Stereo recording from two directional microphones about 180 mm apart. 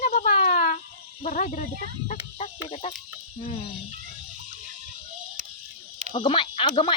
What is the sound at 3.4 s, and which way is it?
Speech, 35° left (ahead or behind).